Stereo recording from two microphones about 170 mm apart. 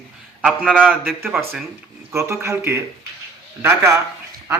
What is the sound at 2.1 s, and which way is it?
Speech, 15° right (ahead or behind).